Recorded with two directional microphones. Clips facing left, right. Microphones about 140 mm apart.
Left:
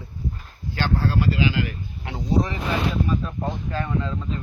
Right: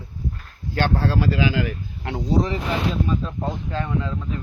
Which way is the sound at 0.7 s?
65° right (ahead or behind).